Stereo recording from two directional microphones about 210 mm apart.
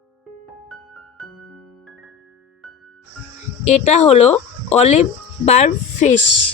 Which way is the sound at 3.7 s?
35° left (ahead or behind).